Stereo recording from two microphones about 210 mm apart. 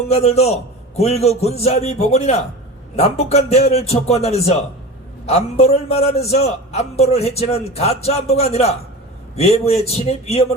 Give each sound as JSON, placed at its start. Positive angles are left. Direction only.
{"t": 0.1, "sound": "a man's voice", "side_deg": 30}